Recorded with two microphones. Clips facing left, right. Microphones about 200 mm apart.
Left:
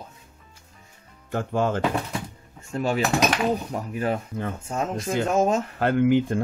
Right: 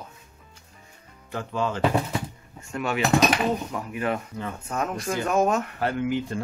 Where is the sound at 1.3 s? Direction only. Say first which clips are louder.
Left 4 dB; 50° left (ahead or behind).